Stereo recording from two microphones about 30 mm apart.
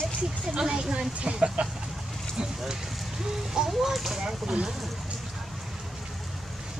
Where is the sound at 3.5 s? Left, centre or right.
Centre.